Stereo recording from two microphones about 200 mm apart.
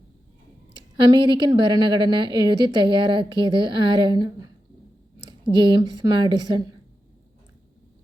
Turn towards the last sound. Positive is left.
turn(degrees=-20)  # may be behind; listen again after turning